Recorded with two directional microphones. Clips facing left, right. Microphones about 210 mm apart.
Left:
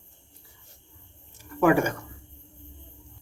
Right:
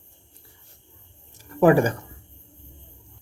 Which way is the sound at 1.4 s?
35° right (ahead or behind).